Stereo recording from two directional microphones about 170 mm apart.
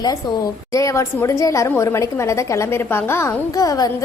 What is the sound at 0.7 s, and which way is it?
A woman's voice, 15° left (ahead or behind).